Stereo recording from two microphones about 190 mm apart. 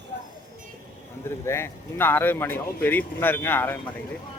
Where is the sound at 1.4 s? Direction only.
15° left (ahead or behind).